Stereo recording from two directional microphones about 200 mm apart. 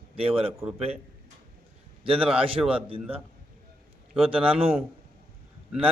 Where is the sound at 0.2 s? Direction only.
30° right (ahead or behind).